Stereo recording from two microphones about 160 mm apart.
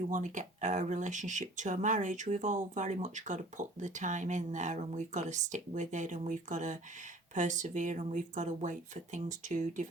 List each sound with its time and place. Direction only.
0.1 s speech: 50° right (ahead or behind)